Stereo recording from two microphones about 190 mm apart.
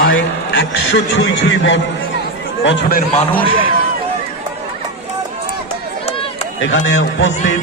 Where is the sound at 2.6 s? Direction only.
60° left (ahead or behind).